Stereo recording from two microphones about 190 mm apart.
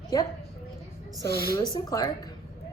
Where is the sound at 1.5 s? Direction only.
20° left (ahead or behind).